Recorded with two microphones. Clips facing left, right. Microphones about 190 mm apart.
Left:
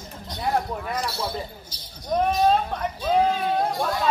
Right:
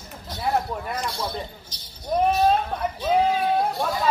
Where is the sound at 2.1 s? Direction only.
10° right (ahead or behind).